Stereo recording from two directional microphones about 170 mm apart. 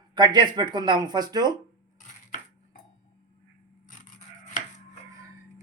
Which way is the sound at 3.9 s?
50° left (ahead or behind).